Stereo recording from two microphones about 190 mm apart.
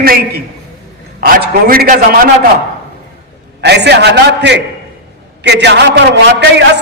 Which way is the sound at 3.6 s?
60° right (ahead or behind).